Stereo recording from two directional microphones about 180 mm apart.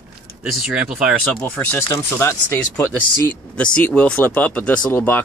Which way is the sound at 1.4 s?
10° left (ahead or behind).